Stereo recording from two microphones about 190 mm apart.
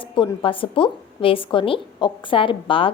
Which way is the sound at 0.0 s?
25° left (ahead or behind).